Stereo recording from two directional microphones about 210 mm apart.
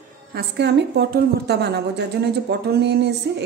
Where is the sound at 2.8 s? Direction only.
55° right (ahead or behind).